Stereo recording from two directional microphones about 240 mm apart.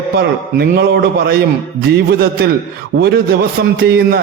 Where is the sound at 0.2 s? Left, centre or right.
Right.